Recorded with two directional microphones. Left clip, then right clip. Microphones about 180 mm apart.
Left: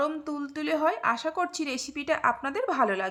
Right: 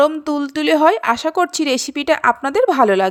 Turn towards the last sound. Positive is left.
turn(degrees=-40)  # may be behind; listen again after turning